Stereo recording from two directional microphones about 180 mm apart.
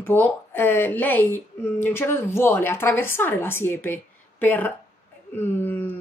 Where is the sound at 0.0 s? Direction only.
10° left (ahead or behind).